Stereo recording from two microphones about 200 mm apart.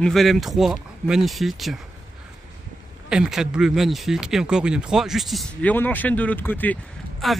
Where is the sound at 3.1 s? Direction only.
5° right (ahead or behind).